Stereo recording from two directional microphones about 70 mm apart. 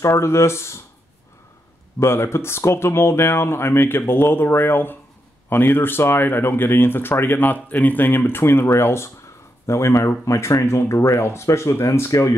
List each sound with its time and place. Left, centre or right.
0.0 s speech: left
2.0 s speech: left